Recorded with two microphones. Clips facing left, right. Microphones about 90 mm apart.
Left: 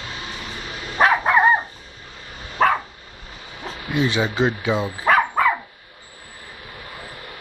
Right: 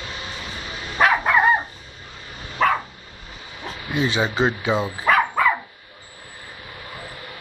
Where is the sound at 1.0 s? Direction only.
25° left (ahead or behind).